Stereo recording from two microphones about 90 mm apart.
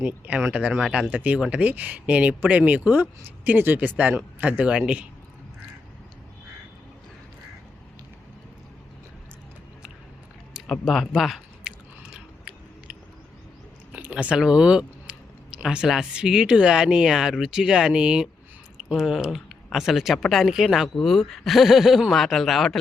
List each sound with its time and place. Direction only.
0.0 s speech: 10° right (ahead or behind)
10.5 s chewing: centre (ahead or behind)
13.9 s speech: 15° right (ahead or behind); by 22.8 s centre (ahead or behind)